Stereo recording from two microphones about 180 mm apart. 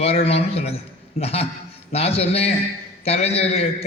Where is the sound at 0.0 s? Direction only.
35° left (ahead or behind).